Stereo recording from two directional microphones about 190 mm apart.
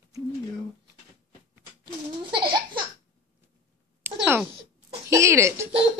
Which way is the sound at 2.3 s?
25° right (ahead or behind).